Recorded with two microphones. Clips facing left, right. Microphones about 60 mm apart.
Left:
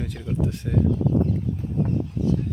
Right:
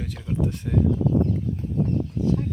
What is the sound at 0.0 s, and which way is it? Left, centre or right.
Speech, centre.